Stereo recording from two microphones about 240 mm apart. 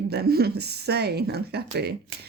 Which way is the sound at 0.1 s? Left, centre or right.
Right.